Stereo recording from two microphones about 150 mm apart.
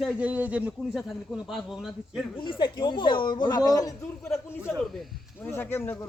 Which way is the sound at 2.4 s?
30° left (ahead or behind).